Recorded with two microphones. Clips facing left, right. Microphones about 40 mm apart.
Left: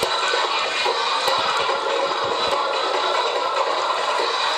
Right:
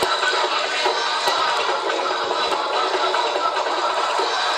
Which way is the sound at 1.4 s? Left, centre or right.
Centre.